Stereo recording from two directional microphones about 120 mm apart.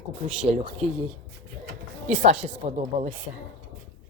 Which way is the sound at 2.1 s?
90° right.